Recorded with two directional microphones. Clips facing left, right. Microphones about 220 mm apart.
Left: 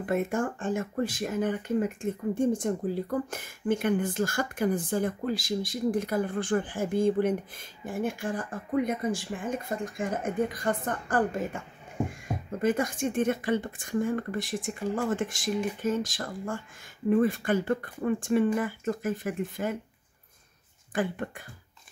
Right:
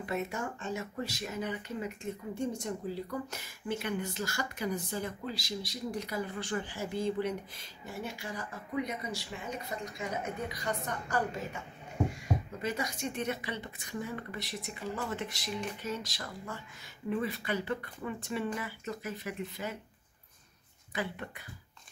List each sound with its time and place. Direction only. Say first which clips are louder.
0.0 s speech: left 7 dB; 50° left (ahead or behind)
12.3 s a sound: right 1 dB; 5° left (ahead or behind)
12.6 s speech: left 9 dB; 50° left (ahead or behind)
20.9 s speech: left 7 dB; 50° left (ahead or behind)